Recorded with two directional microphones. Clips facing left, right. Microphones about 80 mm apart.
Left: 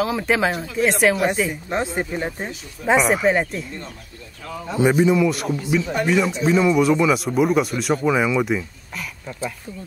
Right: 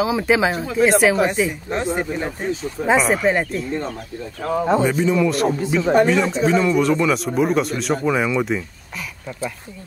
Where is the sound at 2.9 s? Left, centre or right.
Centre.